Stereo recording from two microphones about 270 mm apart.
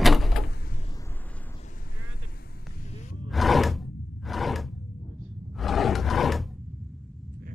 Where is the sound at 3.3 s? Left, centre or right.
Centre.